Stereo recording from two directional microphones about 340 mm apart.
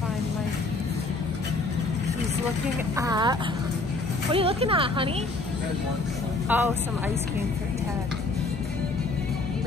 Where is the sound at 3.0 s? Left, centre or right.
Centre.